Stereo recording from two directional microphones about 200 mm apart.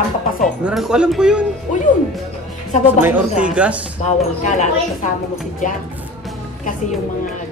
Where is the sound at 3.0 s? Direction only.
10° right (ahead or behind).